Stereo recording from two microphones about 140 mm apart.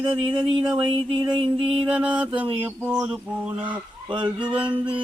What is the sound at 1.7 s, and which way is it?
Mantra, 10° right (ahead or behind).